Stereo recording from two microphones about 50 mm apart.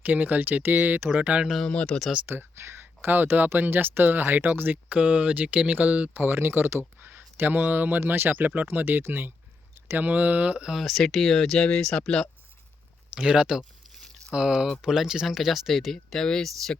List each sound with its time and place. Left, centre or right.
0.0 s speech: right
1.6 s speech: left
2.2 s speech: right
4.9 s speech: right
6.2 s speech: right
8.0 s speech: right
8.3 s speech: right
10.0 s speech: right
10.8 s speech: centre
13.1 s speech: centre
16.1 s speech: centre